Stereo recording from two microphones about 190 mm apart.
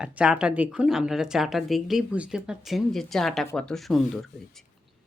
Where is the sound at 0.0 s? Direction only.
5° right (ahead or behind).